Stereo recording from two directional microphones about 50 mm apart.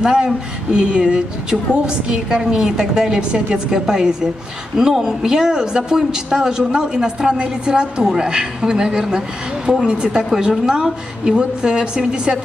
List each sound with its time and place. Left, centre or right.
0.0 s speech: centre